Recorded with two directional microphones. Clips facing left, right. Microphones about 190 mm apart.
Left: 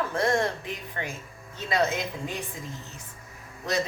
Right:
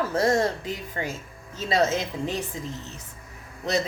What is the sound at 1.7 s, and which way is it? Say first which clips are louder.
Speech: right 3 dB; 35° right (ahead or behind).